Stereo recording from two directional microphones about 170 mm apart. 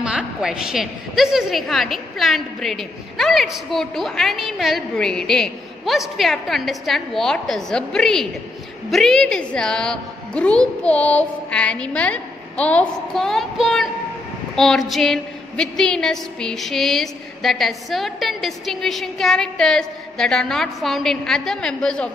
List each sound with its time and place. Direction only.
0.0 s a woman's voice: 5° right (ahead or behind)